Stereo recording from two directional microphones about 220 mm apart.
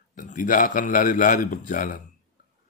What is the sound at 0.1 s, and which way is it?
Speech, 35° left (ahead or behind).